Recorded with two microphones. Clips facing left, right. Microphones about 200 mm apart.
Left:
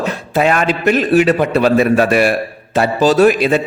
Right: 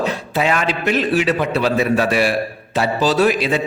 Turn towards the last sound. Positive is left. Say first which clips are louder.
# left 5 dB
turn(degrees=50)  # may be behind; listen again after turning